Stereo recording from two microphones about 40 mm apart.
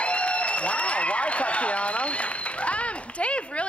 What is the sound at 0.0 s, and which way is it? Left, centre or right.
A man's voice, left.